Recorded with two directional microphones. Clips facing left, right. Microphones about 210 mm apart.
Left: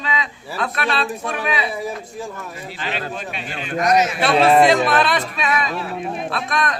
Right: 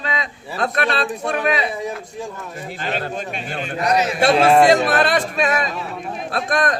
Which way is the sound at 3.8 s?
35° right (ahead or behind).